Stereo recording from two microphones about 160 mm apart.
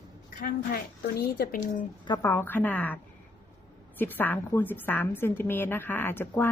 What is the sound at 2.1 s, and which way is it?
A woman's voice, 15° left (ahead or behind).